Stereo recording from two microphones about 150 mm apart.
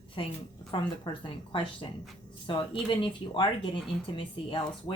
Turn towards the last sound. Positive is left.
turn(degrees=30)  # may be behind; listen again after turning